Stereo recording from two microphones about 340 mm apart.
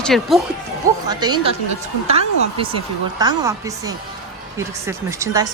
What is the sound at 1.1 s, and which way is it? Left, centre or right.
Speech, centre.